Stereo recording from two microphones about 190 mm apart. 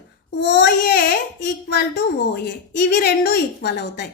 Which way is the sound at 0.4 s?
65° left (ahead or behind).